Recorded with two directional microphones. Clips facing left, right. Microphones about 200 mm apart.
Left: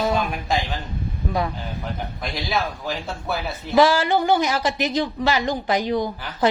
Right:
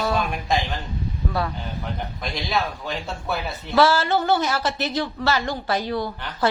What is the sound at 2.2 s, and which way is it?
Speech, centre (ahead or behind).